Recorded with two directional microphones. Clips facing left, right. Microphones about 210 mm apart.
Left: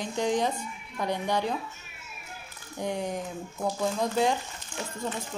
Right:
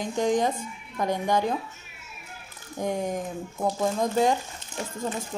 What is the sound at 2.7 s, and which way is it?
Speech, 50° right (ahead or behind).